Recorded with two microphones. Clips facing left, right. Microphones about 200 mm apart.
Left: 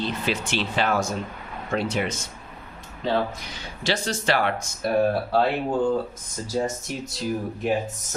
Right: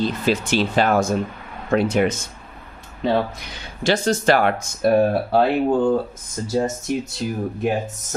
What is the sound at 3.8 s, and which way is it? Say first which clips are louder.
Speech: right 7 dB; 50° right (ahead or behind).